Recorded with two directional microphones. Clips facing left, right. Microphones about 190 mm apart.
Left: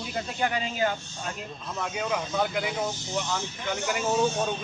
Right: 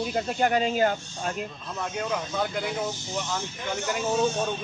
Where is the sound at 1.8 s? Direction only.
5° left (ahead or behind).